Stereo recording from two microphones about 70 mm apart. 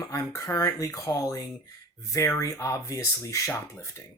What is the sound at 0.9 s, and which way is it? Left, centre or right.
Speech, left.